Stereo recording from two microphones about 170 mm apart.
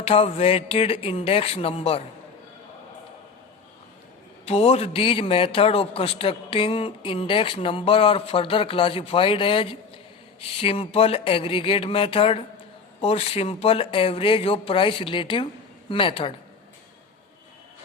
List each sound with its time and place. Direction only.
0.0 s a man's voice: 35° left (ahead or behind)
4.4 s a man's voice: 35° left (ahead or behind)